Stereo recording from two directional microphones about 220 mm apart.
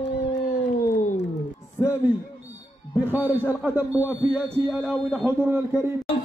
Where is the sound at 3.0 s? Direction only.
10° right (ahead or behind).